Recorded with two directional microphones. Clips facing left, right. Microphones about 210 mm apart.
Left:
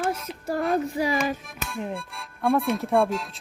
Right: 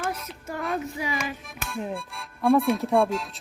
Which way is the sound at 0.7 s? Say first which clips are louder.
Left 5 dB; 35° left (ahead or behind).